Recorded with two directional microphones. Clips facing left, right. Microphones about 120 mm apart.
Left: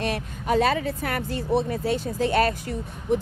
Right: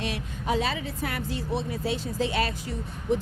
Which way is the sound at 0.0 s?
50° left (ahead or behind).